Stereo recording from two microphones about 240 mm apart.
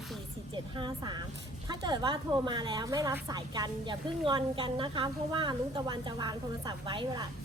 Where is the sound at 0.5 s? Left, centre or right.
Centre.